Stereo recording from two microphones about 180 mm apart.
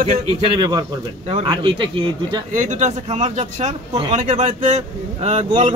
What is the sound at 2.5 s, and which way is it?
Speech, 40° right (ahead or behind).